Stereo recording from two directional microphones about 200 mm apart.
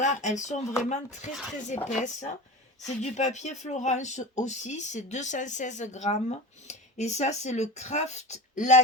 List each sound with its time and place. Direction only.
0.0 s speech: 40° left (ahead or behind)